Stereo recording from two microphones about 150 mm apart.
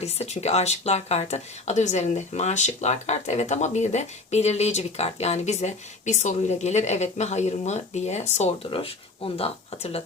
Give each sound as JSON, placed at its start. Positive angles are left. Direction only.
{"t": 0.0, "sound": "speech", "side_deg": 45}